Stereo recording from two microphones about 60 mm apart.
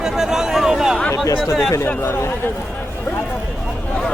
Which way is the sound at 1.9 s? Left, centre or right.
Left.